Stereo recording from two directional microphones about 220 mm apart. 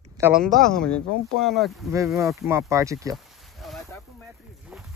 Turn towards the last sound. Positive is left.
turn(degrees=0)  # may be behind; listen again after turning